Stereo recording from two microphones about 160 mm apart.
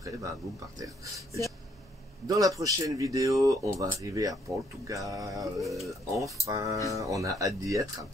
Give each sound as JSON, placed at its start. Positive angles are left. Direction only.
{"t": 0.7, "sound": "speech", "side_deg": -20}
{"t": 5.4, "sound": "a sound", "side_deg": 0}
{"t": 5.9, "sound": "speech", "side_deg": -20}